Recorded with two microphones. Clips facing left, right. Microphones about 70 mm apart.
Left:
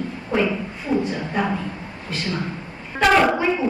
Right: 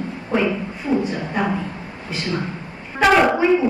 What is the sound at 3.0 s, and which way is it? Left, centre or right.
Speech, centre.